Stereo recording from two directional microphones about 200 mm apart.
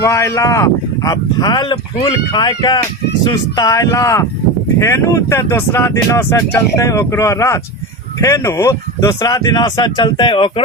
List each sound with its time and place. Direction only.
0.0 s speech: 15° left (ahead or behind)